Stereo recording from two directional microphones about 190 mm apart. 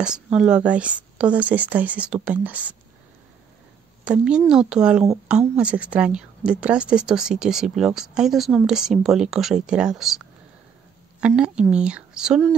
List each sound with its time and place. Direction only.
0.0 s speech: 5° right (ahead or behind)
4.0 s a woman's voice: 5° right (ahead or behind)